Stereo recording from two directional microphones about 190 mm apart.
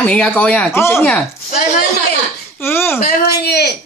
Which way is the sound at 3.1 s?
60° left (ahead or behind).